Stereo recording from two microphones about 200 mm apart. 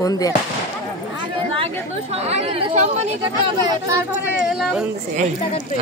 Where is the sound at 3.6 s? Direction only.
15° right (ahead or behind).